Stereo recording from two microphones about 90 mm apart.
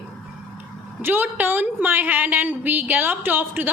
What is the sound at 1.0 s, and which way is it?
A woman's voice, 20° right (ahead or behind).